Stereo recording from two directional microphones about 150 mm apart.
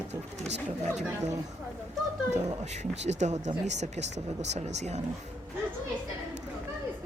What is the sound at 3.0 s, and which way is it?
A woman's voice, 50° right (ahead or behind).